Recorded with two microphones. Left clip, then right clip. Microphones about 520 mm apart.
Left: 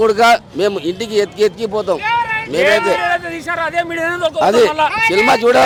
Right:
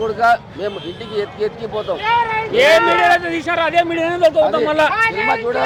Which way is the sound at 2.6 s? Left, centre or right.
Left.